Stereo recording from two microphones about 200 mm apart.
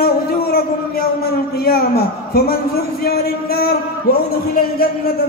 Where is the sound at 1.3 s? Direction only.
50° left (ahead or behind).